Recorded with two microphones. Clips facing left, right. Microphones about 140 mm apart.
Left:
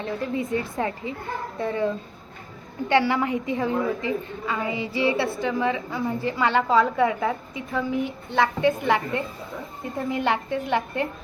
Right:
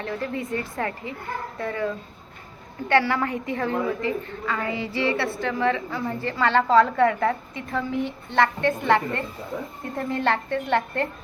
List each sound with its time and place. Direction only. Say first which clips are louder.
0.0 s a woman's voice: left 2 dB; 20° left (ahead or behind)
2.9 s a woman's voice: even; 20° left (ahead or behind)